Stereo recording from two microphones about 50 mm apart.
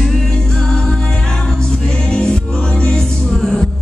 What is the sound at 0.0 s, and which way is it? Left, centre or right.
Music, centre.